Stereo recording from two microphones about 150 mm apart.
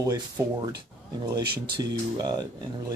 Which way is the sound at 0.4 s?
20° right (ahead or behind).